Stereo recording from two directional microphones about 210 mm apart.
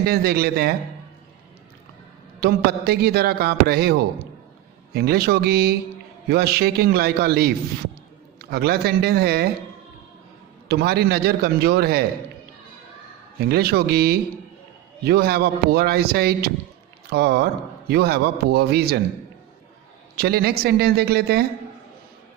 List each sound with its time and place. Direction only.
0.0 s a man's voice: 50° right (ahead or behind)
2.4 s a man's voice: 50° right (ahead or behind)
10.7 s a man's voice: 50° right (ahead or behind)
13.4 s a man's voice: 50° right (ahead or behind)
20.1 s a man's voice: 50° right (ahead or behind)